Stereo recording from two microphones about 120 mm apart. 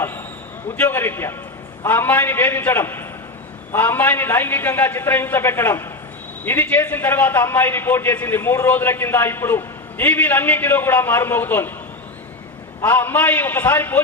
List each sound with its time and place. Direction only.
0.8 s a man's voice: 15° left (ahead or behind)
12.8 s a man's voice: 15° left (ahead or behind)